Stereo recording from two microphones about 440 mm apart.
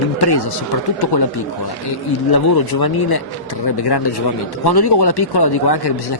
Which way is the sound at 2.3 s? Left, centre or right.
Left.